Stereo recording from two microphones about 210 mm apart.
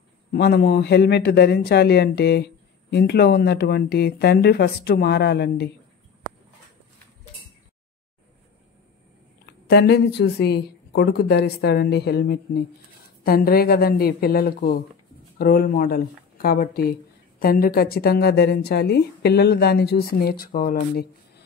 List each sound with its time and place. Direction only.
0.3 s a man's voice: 50° left (ahead or behind)
9.7 s a man's voice: 50° left (ahead or behind)